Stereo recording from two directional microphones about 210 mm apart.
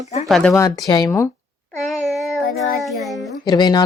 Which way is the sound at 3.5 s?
20° left (ahead or behind).